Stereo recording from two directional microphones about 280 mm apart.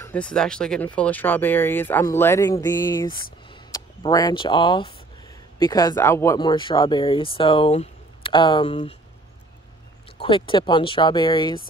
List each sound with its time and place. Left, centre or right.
0.0 s speech: centre
3.4 s a sound: centre
5.6 s speech: centre
10.1 s speech: centre